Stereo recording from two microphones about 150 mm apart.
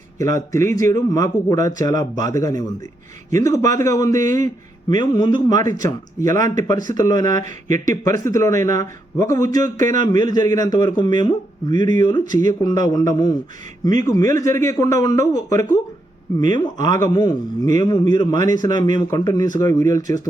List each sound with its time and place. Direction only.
0.2 s a man's voice: 20° left (ahead or behind)
7.4 s speech: 55° right (ahead or behind)
8.0 s a man's voice: 20° left (ahead or behind)